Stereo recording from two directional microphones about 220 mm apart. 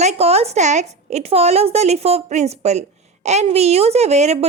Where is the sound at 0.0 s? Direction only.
30° right (ahead or behind).